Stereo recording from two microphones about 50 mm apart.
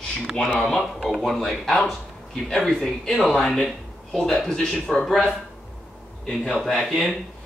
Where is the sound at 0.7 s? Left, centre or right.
Centre.